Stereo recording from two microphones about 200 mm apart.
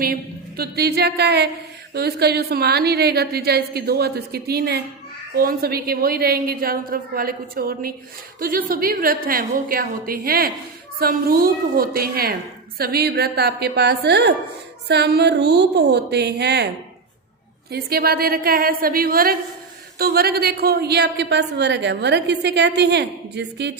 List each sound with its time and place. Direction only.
0.0 s a woman's voice: 50° right (ahead or behind)
17.7 s a woman's voice: 50° right (ahead or behind)